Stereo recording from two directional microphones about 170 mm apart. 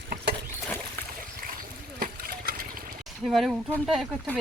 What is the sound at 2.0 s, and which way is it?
Water, 60° right (ahead or behind).